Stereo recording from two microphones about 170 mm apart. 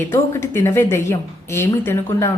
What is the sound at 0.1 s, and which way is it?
Speech, 15° left (ahead or behind).